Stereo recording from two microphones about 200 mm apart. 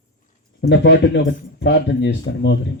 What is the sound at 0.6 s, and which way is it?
Speech, 60° left (ahead or behind).